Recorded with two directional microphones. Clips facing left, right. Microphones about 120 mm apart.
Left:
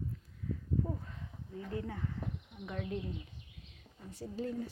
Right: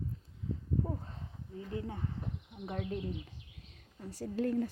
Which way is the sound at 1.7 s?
25° right (ahead or behind).